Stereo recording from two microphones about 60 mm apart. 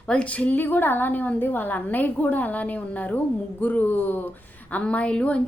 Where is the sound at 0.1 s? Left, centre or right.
Left.